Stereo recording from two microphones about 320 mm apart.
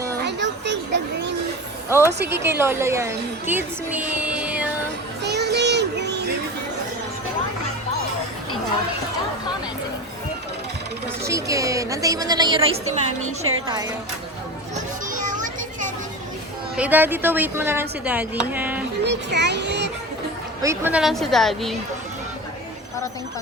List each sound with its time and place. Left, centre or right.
0.3 s children playing: right
1.9 s a woman's voice: centre
5.2 s child singing: right
11.2 s a woman's voice: centre
15.1 s children playing: right
16.7 s speech: centre
19.0 s speech: right
20.6 s speech: centre